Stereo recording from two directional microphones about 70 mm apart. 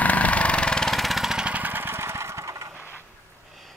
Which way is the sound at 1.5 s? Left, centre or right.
Right.